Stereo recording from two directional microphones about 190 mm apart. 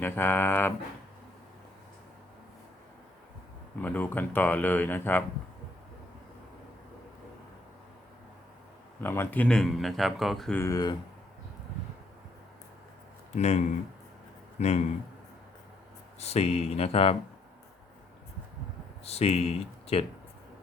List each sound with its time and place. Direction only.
0.0 s speech: 10° left (ahead or behind)
3.8 s speech: 10° left (ahead or behind)
9.0 s speech: 10° left (ahead or behind)
10.6 s speech: 20° left (ahead or behind)
13.3 s speech: 35° left (ahead or behind)
16.2 s speech: 35° left (ahead or behind)
19.0 s speech: 30° left (ahead or behind)